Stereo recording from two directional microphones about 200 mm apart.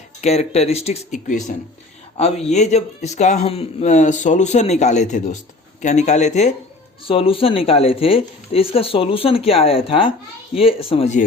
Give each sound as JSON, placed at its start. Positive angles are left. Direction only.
{"t": 0.2, "sound": "speech", "side_deg": 30}